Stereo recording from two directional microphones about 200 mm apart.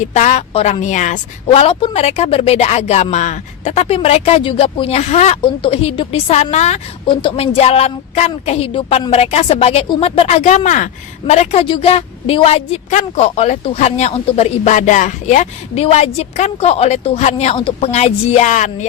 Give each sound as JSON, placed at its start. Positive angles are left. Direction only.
{"t": 0.0, "sound": "a woman's voice", "side_deg": 35}